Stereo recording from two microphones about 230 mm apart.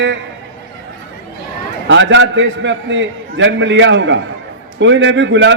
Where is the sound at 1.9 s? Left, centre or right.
Right.